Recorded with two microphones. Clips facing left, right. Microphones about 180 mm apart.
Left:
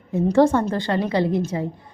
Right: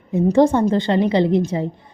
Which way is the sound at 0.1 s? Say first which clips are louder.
Right 2 dB; 20° right (ahead or behind).